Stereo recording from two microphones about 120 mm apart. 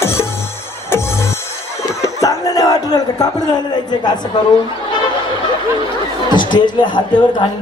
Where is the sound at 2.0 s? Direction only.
30° left (ahead or behind).